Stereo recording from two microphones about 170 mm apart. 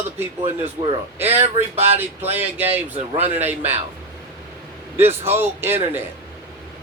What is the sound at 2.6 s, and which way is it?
Speech, 35° right (ahead or behind).